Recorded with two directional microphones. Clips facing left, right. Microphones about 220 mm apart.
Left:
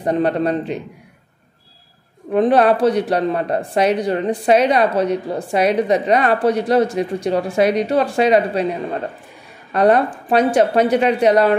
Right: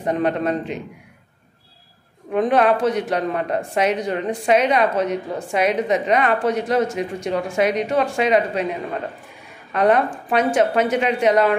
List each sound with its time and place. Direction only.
0.0 s speech: 35° left (ahead or behind)
2.3 s speech: 35° left (ahead or behind)
9.7 s speech: 35° left (ahead or behind)